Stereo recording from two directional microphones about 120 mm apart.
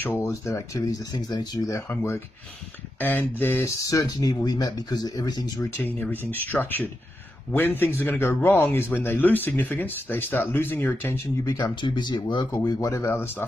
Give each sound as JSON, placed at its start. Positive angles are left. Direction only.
{"t": 0.0, "sound": "speech", "side_deg": 25}
{"t": 3.0, "sound": "speech", "side_deg": 15}
{"t": 5.9, "sound": "speech", "side_deg": 15}
{"t": 11.4, "sound": "speech", "side_deg": 35}
{"t": 12.6, "sound": "speech", "side_deg": 30}